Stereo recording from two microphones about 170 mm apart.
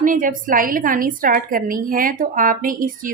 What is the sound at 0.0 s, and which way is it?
A woman's voice, 50° right (ahead or behind).